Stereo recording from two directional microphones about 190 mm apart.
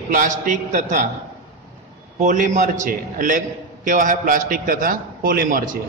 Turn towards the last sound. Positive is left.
turn(degrees=-45)  # may be behind; listen again after turning